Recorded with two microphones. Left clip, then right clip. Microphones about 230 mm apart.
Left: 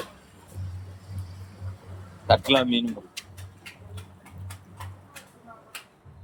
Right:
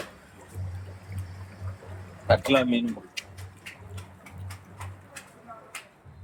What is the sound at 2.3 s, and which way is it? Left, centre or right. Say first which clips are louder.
Speech: left 2 dB; centre.